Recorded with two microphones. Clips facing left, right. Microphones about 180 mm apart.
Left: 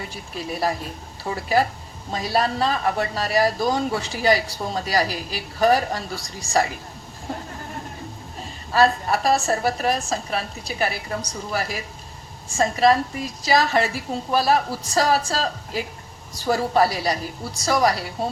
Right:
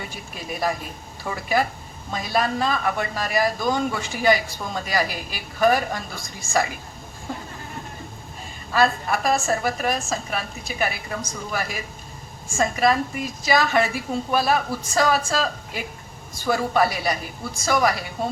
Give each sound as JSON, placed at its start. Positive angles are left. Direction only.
{"t": 0.3, "sound": "a man's voice", "side_deg": 35}
{"t": 8.7, "sound": "a man's voice", "side_deg": 35}